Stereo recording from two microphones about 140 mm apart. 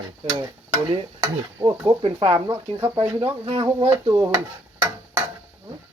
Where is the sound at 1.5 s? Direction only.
20° right (ahead or behind).